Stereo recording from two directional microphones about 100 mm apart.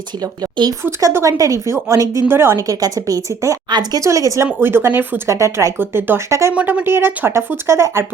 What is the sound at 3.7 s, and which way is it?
Speech, 50° right (ahead or behind).